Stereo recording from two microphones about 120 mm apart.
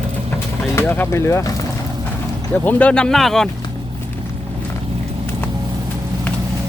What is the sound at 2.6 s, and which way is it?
Speech, 15° left (ahead or behind).